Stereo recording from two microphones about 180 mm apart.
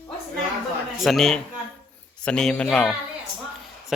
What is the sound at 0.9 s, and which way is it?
Speech, centre (ahead or behind).